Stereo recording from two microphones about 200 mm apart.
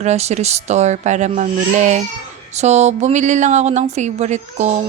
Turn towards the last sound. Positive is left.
turn(degrees=-35)  # may be behind; listen again after turning